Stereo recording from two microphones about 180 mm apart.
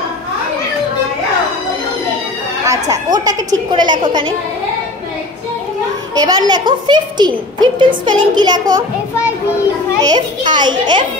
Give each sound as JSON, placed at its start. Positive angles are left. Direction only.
{"t": 2.6, "sound": "a child's voice", "side_deg": -20}
{"t": 6.1, "sound": "a child's voice", "side_deg": -20}
{"t": 10.0, "sound": "a child's voice", "side_deg": -25}